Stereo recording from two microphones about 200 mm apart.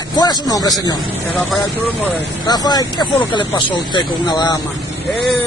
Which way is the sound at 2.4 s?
20° left (ahead or behind).